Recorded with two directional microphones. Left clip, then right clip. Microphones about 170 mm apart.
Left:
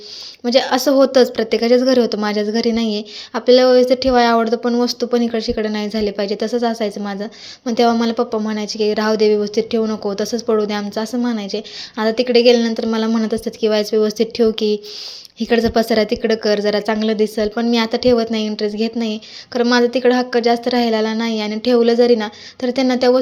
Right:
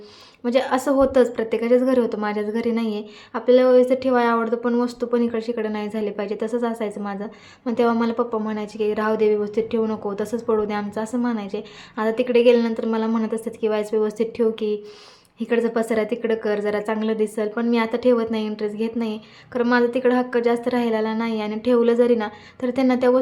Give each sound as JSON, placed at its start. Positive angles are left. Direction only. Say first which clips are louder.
{"t": 0.4, "sound": "a woman's voice", "louder": "left 5 dB", "side_deg": 15}